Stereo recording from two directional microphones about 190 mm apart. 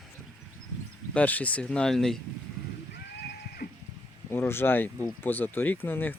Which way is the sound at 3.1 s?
60° left (ahead or behind).